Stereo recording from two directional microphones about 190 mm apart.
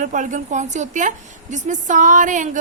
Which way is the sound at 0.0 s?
40° right (ahead or behind).